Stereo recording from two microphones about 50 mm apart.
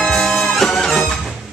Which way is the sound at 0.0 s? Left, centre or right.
Centre.